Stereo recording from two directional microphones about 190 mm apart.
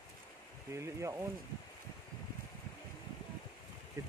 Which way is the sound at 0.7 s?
15° right (ahead or behind).